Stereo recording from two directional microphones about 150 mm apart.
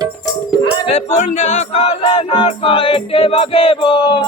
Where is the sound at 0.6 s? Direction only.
45° left (ahead or behind).